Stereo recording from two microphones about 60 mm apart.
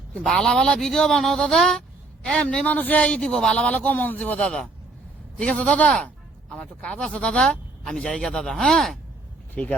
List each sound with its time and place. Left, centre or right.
0.2 s speech: centre
3.2 s speech: centre
9.6 s speech: left